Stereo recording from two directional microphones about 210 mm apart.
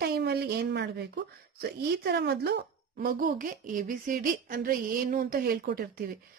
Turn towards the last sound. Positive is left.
turn(degrees=-45)  # may be behind; listen again after turning